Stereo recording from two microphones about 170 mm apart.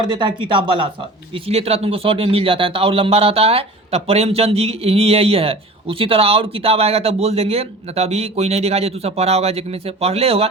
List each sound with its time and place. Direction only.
0.1 s speech: 25° right (ahead or behind)